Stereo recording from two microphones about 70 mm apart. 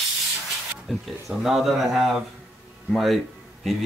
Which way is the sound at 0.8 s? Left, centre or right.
Centre.